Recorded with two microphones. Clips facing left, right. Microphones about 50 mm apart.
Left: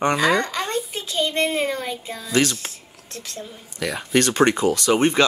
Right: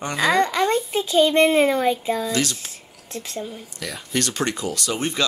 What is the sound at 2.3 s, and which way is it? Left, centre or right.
Speech, left.